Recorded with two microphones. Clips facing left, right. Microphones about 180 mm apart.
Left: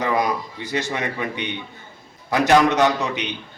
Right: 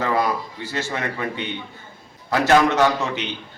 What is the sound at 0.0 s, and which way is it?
A man's voice, 15° left (ahead or behind).